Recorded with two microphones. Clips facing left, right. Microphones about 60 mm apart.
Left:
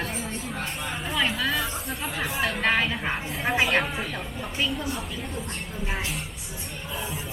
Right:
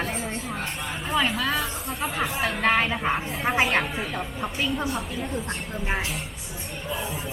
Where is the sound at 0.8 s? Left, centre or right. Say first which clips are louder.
Even; centre.